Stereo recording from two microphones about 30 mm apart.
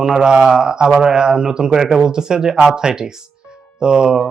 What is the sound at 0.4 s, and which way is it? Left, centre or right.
Speech, right.